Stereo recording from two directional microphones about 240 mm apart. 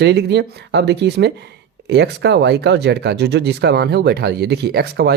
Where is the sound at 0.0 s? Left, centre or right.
Right.